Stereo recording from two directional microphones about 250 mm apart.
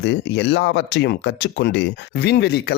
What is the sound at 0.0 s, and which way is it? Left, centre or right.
Speech, left.